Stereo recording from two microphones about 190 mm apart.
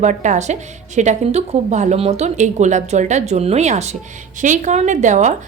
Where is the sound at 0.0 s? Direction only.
40° right (ahead or behind).